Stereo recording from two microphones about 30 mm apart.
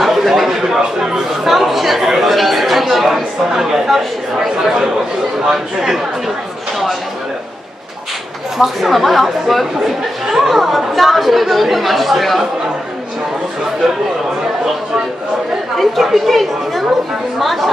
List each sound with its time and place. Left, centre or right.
0.0 s a man's voice: centre
0.7 s a sound: centre
1.5 s chatter: centre
3.2 s speech: centre
8.5 s speech: centre
15.8 s speech: centre